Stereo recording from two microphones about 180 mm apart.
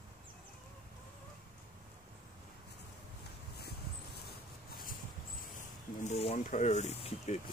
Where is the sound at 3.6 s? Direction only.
60° left (ahead or behind).